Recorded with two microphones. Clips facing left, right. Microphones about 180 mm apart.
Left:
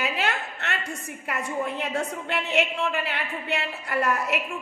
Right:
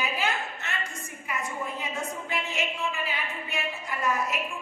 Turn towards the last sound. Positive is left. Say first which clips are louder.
# left 4 dB
turn(degrees=70)  # may be behind; listen again after turning